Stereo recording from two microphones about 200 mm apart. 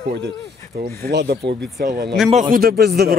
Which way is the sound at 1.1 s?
55° right (ahead or behind).